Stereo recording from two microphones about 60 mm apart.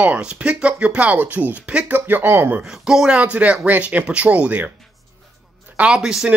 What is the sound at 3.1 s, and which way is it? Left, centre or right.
Speech, right.